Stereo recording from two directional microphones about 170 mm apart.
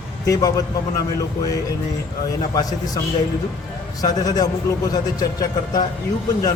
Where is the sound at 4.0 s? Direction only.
20° left (ahead or behind).